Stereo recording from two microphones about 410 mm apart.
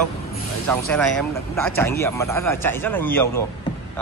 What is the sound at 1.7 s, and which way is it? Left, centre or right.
Speech, centre.